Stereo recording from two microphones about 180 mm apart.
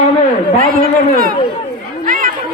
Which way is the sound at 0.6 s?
50° right (ahead or behind).